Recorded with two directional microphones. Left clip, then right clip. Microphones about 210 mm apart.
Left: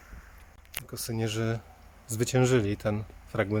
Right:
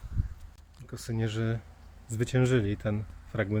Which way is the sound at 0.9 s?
15° left (ahead or behind).